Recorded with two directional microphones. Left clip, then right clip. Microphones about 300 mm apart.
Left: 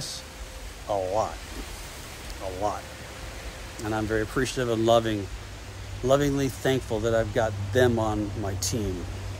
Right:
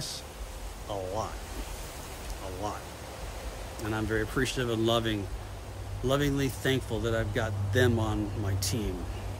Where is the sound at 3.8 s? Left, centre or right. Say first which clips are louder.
Left 4 dB; centre.